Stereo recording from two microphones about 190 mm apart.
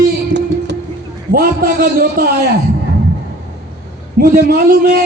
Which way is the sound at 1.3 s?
50° right (ahead or behind).